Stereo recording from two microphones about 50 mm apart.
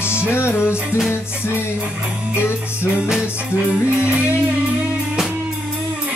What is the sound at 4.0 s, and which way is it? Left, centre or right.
Music, right.